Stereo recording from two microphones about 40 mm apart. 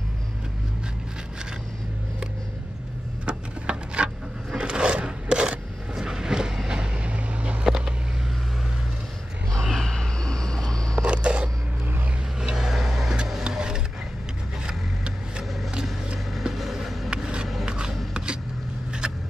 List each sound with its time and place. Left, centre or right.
3.3 s a sound: right
7.6 s vehicle: centre
9.6 s a sound: centre
11.0 s scissors: right
12.4 s vehicle: centre
16.3 s vehicle: centre
17.1 s vehicle: right
17.6 s a sound: centre
18.1 s vehicle: right